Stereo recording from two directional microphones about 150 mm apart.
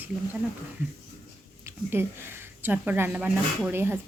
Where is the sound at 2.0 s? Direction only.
15° right (ahead or behind).